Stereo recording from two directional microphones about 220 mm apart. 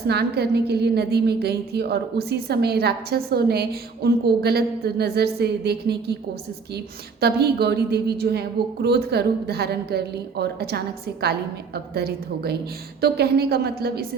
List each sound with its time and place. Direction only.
0.1 s a woman's voice: 45° right (ahead or behind)